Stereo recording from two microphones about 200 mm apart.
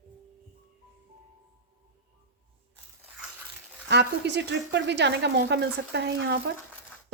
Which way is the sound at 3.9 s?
60° right (ahead or behind).